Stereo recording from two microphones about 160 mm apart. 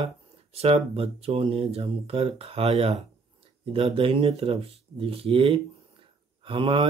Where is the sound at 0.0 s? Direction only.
40° right (ahead or behind).